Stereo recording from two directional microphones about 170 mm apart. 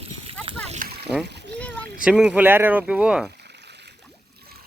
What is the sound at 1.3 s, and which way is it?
Splash, 90° right.